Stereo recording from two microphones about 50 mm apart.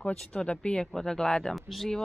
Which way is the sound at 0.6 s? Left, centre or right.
Centre.